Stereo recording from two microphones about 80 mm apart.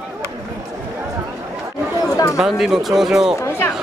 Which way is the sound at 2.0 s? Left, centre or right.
Left.